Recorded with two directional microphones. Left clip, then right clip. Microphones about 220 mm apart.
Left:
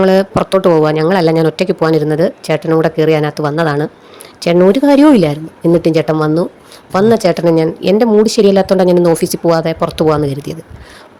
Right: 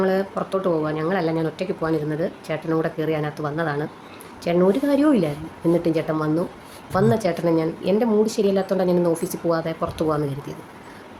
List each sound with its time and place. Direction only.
0.0 s speech: 45° left (ahead or behind)